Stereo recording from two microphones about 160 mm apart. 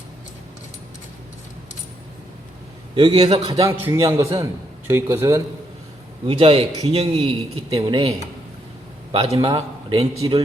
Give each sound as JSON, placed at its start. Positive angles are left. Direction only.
{"t": 2.9, "sound": "a man's voice", "side_deg": -40}
{"t": 3.6, "sound": "a man's voice", "side_deg": -15}
{"t": 6.2, "sound": "a man's voice", "side_deg": -35}
{"t": 7.7, "sound": "a man's voice", "side_deg": -25}
{"t": 9.1, "sound": "a man's voice", "side_deg": -40}